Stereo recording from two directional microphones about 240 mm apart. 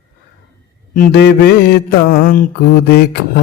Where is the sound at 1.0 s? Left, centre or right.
Left.